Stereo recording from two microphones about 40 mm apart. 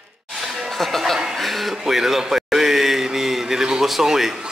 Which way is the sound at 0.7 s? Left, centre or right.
Centre.